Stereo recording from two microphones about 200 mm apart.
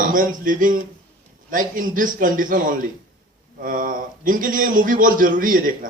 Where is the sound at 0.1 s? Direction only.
40° right (ahead or behind).